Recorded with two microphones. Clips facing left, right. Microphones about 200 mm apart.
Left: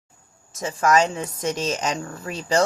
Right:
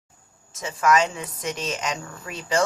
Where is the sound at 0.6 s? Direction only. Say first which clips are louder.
Left 2 dB; 40° left (ahead or behind).